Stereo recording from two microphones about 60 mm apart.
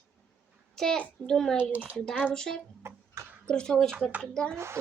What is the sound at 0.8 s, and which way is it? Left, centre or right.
Speech, centre.